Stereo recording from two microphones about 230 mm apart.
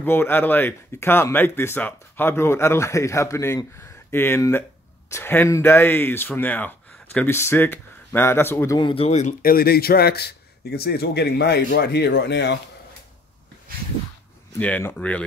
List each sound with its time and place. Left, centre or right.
0.0 s speech: centre; by 12.5 s left
14.6 s speech: centre